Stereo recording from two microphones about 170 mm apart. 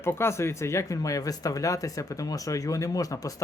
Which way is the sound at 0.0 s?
15° left (ahead or behind).